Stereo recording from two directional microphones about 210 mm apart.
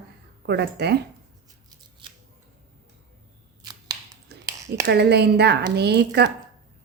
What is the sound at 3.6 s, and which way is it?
Scissors, 20° right (ahead or behind).